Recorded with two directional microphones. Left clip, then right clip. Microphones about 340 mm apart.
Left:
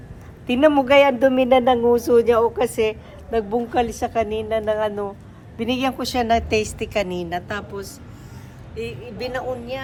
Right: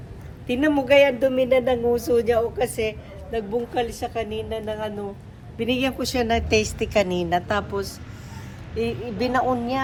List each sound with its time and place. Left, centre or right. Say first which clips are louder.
0.4 s a woman's voice: left 5 dB; centre
5.5 s a woman's voice: left 1 dB; centre